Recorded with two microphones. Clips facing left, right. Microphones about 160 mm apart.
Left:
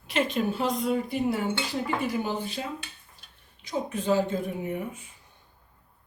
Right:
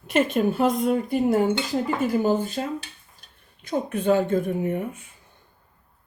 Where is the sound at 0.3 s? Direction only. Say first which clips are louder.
Right 6 dB; 50° right (ahead or behind).